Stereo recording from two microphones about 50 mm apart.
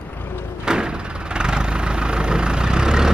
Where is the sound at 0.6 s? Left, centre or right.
Centre.